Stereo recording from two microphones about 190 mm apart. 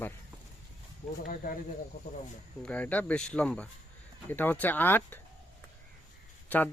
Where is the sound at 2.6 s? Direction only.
5° left (ahead or behind).